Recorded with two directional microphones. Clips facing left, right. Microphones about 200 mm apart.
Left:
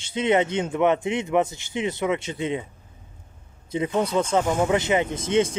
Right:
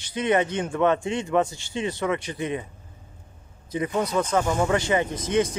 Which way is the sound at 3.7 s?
25° left (ahead or behind).